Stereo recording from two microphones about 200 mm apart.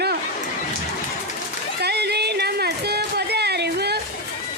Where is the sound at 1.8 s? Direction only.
55° right (ahead or behind).